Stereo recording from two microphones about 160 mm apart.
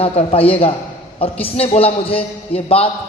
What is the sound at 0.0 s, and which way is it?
A man's voice, 35° left (ahead or behind).